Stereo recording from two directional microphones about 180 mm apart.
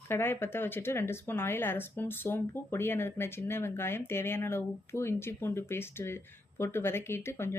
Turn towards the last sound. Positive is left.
turn(degrees=15)  # may be behind; listen again after turning